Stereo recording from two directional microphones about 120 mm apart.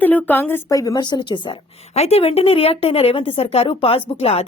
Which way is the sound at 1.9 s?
60° left (ahead or behind).